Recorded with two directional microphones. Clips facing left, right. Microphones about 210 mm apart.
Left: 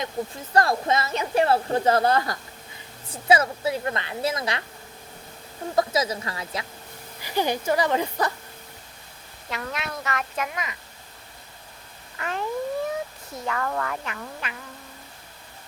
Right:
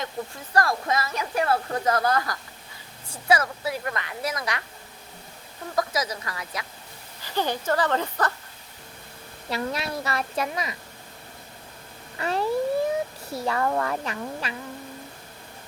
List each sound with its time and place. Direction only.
0.5 s speech: 25° left (ahead or behind)
5.7 s speech: 25° left (ahead or behind)
7.2 s speech: 15° left (ahead or behind)
9.5 s a woman's voice: 35° right (ahead or behind)
12.1 s a sound: 35° right (ahead or behind)
13.3 s a woman's voice: 35° right (ahead or behind)